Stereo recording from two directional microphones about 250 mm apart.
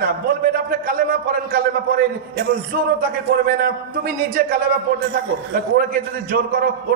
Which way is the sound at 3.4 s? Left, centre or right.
Right.